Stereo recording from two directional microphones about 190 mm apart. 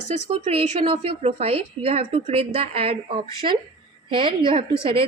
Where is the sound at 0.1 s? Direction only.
35° right (ahead or behind).